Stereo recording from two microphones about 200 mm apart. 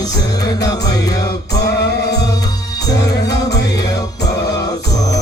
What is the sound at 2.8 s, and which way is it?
Music, 20° left (ahead or behind).